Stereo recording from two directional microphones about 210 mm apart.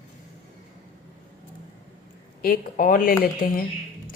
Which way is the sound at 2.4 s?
40° left (ahead or behind).